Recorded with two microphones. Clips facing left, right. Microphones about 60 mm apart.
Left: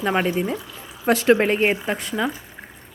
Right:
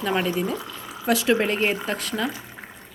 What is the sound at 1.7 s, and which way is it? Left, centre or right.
Speech, centre.